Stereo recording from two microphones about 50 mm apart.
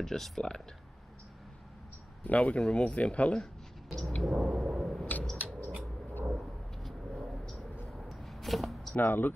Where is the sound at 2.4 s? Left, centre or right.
Centre.